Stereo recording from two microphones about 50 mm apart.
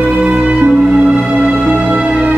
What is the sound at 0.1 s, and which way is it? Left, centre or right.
Music, centre.